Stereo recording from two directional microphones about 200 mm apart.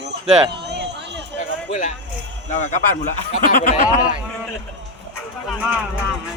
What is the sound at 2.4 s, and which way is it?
Speech, 40° left (ahead or behind).